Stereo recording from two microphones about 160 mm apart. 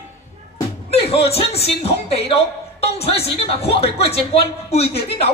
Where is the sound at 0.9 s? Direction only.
40° left (ahead or behind).